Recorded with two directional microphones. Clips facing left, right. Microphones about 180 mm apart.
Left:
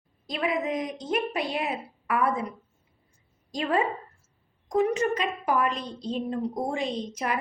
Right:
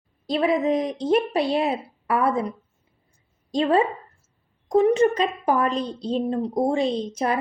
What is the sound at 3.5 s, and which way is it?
A woman's voice, 30° right (ahead or behind).